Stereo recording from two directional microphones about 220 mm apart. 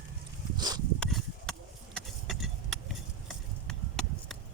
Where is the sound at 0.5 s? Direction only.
15° right (ahead or behind).